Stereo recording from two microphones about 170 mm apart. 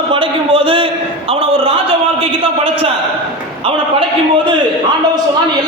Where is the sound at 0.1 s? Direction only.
30° right (ahead or behind).